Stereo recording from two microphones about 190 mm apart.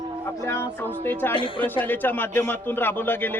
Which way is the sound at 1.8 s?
10° left (ahead or behind).